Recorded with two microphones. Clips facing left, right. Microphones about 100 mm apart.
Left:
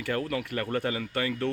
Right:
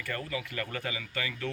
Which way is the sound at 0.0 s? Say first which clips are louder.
Left 6 dB; 70° left (ahead or behind).